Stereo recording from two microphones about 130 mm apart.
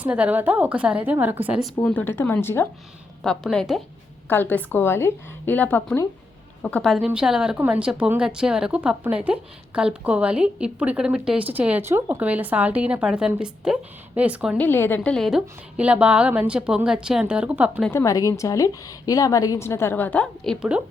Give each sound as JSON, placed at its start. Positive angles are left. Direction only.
{"t": 0.0, "sound": "speech", "side_deg": -10}
{"t": 1.8, "sound": "a woman's voice", "side_deg": 15}
{"t": 3.2, "sound": "a woman's voice", "side_deg": 5}
{"t": 4.3, "sound": "a woman's voice", "side_deg": 15}
{"t": 14.6, "sound": "speech", "side_deg": 15}
{"t": 17.9, "sound": "a woman's voice", "side_deg": 25}
{"t": 20.6, "sound": "speech", "side_deg": -10}